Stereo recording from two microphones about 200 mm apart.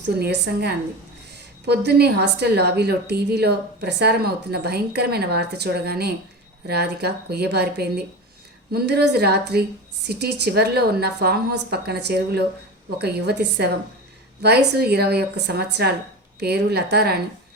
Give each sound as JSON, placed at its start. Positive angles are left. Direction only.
{"t": 0.2, "sound": "a woman's voice", "side_deg": -55}